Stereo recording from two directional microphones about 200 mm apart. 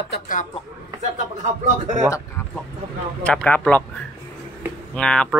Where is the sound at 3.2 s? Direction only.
5° left (ahead or behind).